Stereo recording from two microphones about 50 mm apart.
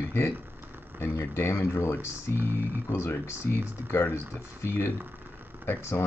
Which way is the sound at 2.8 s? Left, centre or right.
Left.